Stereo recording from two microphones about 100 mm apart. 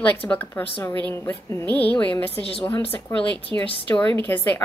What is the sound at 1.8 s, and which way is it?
Speech, 15° left (ahead or behind).